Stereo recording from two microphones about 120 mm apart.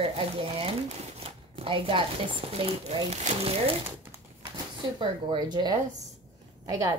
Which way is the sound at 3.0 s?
60° right (ahead or behind).